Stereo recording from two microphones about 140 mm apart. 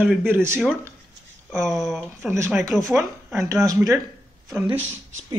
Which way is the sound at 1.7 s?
Centre (ahead or behind).